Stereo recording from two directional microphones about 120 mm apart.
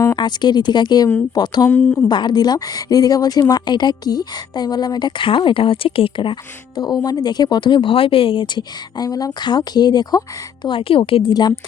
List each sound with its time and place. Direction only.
0.2 s a woman's voice: 35° left (ahead or behind)
1.7 s speech: 10° left (ahead or behind)
2.0 s a woman's voice: 35° left (ahead or behind)